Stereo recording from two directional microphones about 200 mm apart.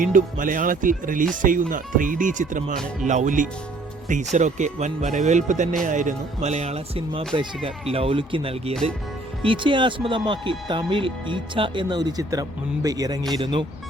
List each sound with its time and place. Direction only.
0.0 s speech: 40° right (ahead or behind); by 13.7 s 25° right (ahead or behind)